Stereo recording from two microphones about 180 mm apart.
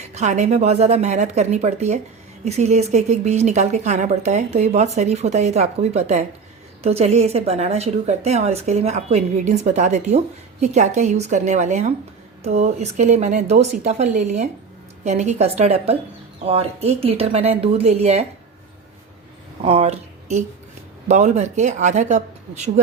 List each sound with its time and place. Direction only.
0.1 s a woman's voice: 40° right (ahead or behind)
19.6 s a woman's voice: 35° right (ahead or behind)